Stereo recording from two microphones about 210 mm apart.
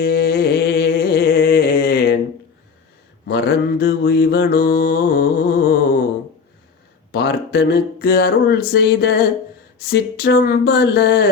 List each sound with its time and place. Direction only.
0.0 s a sound: 45° left (ahead or behind)
3.2 s mantra: 50° left (ahead or behind)
7.1 s speech: 50° left (ahead or behind)